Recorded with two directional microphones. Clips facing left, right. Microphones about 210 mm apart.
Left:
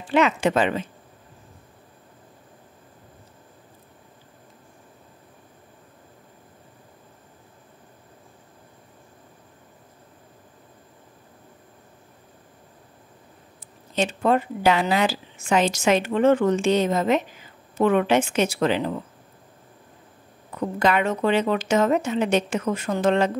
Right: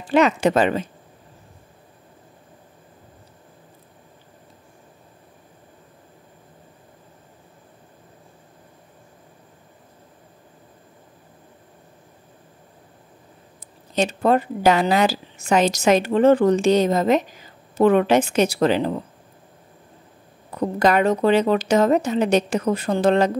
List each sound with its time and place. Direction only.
0.1 s a woman's voice: 40° right (ahead or behind)
13.9 s a woman's voice: 40° right (ahead or behind)
20.5 s a woman's voice: 40° right (ahead or behind)